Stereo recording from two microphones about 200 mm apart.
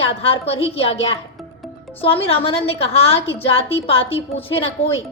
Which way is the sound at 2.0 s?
30° left (ahead or behind).